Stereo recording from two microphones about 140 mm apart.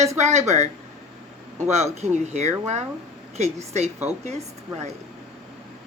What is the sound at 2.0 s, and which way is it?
A woman's voice, 50° right (ahead or behind).